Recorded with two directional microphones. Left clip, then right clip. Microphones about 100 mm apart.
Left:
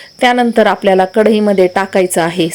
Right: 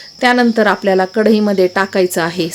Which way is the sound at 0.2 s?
30° left (ahead or behind).